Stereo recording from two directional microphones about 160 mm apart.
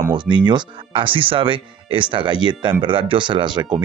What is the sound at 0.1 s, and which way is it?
Speech, 30° right (ahead or behind).